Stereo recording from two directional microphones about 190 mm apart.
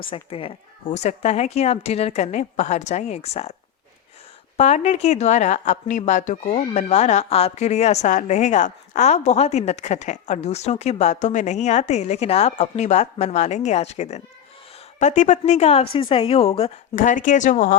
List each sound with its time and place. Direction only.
0.0 s speech: 30° left (ahead or behind)
4.5 s speech: 35° left (ahead or behind)
17.0 s speech: 45° left (ahead or behind)